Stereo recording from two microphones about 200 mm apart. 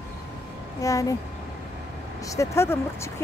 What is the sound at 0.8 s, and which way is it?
Speech, 15° left (ahead or behind).